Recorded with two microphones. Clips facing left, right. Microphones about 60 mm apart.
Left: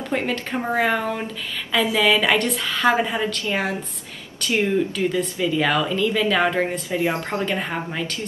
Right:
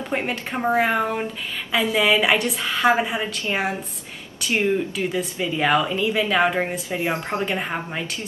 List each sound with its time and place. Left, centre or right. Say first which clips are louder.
0.1 s a woman's voice: left 2 dB; centre
4.5 s a woman's voice: left 1 dB; right; by 6.8 s centre
6.9 s a woman's voice: left 2 dB; right